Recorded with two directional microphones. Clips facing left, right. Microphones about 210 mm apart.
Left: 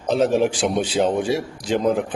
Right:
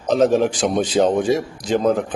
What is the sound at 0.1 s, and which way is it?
Speech, 40° right (ahead or behind).